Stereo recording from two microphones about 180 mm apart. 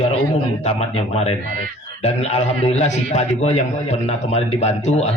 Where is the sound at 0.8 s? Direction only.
35° left (ahead or behind).